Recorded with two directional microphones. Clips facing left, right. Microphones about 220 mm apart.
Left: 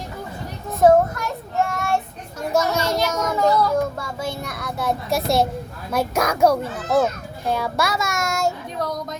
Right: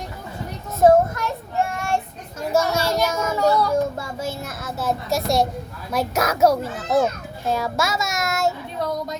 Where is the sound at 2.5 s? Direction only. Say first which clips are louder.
Even; 10° right (ahead or behind).